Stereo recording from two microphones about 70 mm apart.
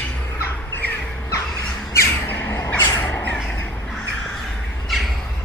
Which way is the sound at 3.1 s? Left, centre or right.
Left.